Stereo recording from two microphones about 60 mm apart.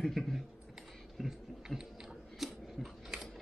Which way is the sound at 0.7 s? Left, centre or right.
Centre.